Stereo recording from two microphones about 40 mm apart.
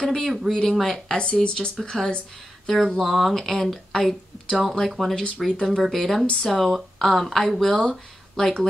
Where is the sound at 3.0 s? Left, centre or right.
Centre.